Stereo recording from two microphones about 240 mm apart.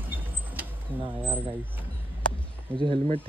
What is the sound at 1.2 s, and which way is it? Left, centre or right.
Vehicle, right.